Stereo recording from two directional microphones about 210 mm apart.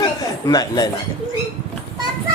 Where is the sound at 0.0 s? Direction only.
20° left (ahead or behind).